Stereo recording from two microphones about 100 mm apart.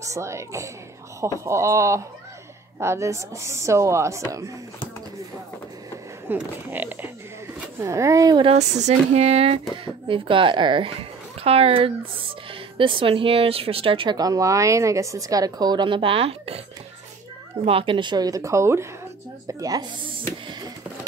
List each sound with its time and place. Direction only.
0.0 s speech: 30° right (ahead or behind)
6.3 s speech: 15° right (ahead or behind)
7.8 s a woman's voice: 30° right (ahead or behind)
8.4 s speech: 70° right (ahead or behind)
9.1 s speech: 90° right; by 10.9 s 55° right (ahead or behind)
11.4 s speech: 75° right (ahead or behind); by 14.1 s 60° right (ahead or behind)
14.1 s a woman's voice: 40° right (ahead or behind); by 16.6 s 80° right
17.6 s a woman's voice: 65° right (ahead or behind); by 19.9 s 35° right (ahead or behind)
20.0 s speech: 55° right (ahead or behind)